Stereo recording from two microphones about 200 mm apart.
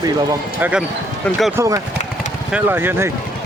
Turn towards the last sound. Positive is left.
turn(degrees=-10)  # may be behind; listen again after turning